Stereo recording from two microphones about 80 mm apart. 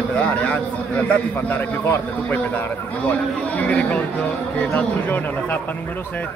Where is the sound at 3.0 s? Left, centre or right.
Centre.